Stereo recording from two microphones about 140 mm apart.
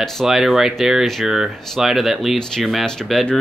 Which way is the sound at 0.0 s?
Centre (ahead or behind).